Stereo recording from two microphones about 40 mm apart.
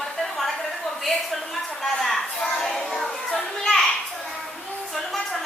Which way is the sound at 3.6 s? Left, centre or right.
Centre.